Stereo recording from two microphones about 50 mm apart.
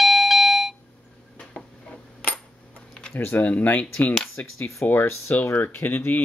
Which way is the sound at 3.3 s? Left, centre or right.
Left.